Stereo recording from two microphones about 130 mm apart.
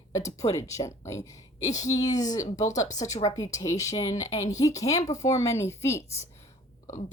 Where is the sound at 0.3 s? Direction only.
25° left (ahead or behind).